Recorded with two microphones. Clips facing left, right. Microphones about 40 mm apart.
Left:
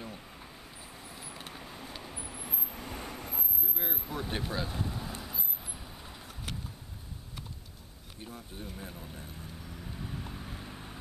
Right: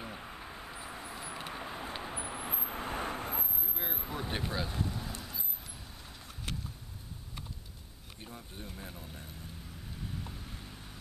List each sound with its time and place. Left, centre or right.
0.0 s vehicle: centre
3.6 s vehicle: centre
8.2 s speech: centre
10.0 s vehicle: centre